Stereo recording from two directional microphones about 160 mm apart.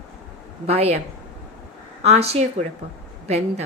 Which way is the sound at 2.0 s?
40° right (ahead or behind).